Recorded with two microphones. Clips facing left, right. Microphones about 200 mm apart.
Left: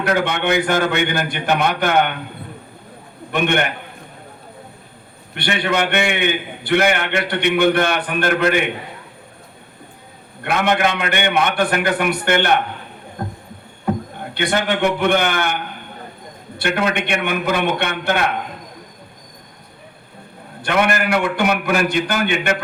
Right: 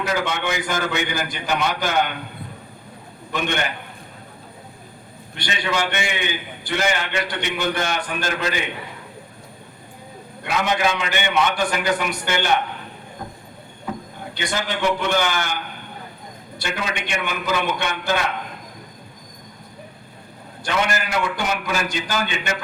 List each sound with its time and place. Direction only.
0.0 s a man's voice: 60° left (ahead or behind)
3.3 s a man's voice: 60° left (ahead or behind)
5.3 s a man's voice: 60° left (ahead or behind)
10.4 s a man's voice: 60° left (ahead or behind)
13.2 s a sound: 55° left (ahead or behind)
14.3 s a man's voice: 60° left (ahead or behind)
20.6 s a man's voice: 60° left (ahead or behind)